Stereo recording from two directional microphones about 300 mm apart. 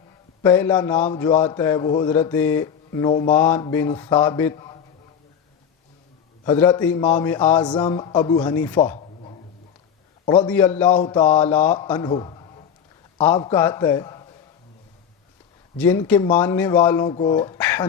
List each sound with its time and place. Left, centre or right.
0.4 s a man's voice: centre
6.4 s a man's voice: centre
9.0 s a sound: centre
10.2 s a man's voice: centre
15.8 s a man's voice: centre